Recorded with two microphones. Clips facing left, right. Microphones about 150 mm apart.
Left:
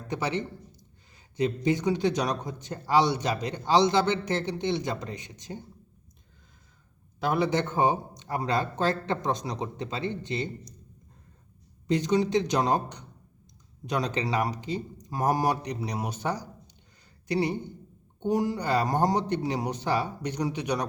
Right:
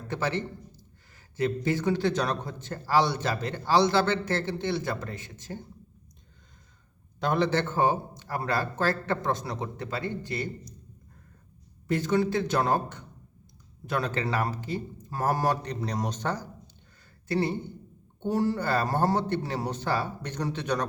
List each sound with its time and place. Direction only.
0.1 s a man's voice: 15° left (ahead or behind)
7.2 s a man's voice: 10° left (ahead or behind)
11.9 s a man's voice: 15° left (ahead or behind)